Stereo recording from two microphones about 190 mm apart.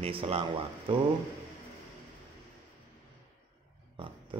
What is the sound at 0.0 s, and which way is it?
Speech, 30° right (ahead or behind).